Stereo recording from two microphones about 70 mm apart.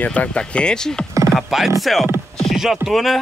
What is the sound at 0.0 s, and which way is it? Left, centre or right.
Speech, centre.